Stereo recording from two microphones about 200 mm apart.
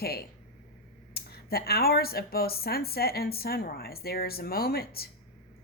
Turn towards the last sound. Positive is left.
turn(degrees=50)  # may be behind; listen again after turning